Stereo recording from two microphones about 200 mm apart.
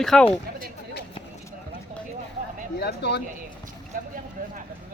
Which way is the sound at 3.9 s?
45° right (ahead or behind).